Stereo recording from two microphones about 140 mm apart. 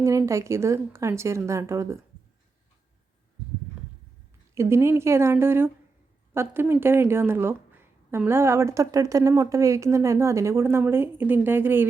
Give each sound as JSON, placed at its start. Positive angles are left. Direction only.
{"t": 0.0, "sound": "a woman's voice", "side_deg": -20}
{"t": 4.5, "sound": "a woman's voice", "side_deg": -20}